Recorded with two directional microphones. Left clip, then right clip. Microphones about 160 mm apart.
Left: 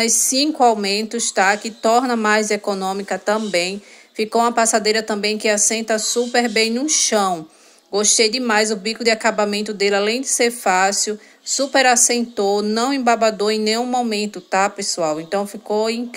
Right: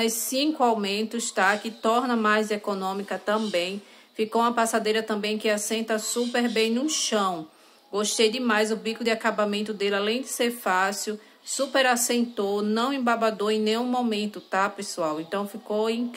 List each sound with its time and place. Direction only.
0.0 s a woman's voice: 25° left (ahead or behind)